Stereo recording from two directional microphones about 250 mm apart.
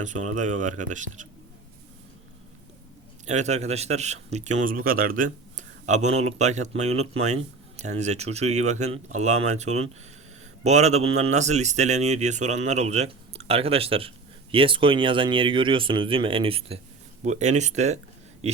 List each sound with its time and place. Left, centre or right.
0.0 s speech: right
3.2 s speech: right